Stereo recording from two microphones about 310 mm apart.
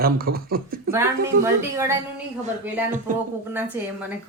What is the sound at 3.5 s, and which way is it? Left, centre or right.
Speech, centre.